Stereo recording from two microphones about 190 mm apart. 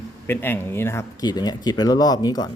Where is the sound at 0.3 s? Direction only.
10° left (ahead or behind).